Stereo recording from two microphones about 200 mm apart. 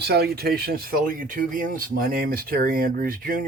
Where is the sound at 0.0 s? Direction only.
55° right (ahead or behind).